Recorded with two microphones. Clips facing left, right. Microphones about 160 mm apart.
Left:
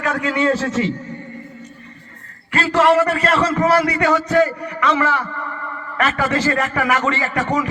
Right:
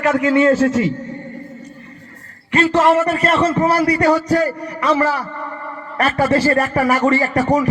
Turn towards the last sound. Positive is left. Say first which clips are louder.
# right 5 dB
turn(degrees=-40)  # may be behind; listen again after turning